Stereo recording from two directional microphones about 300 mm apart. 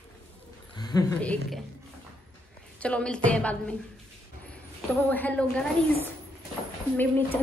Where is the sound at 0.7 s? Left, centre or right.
Centre.